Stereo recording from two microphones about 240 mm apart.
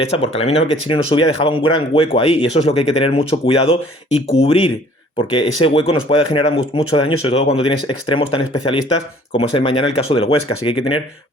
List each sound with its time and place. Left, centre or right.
0.2 s speech: left